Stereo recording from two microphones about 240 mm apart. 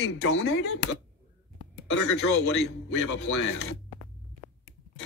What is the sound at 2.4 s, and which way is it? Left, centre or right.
Speech, left.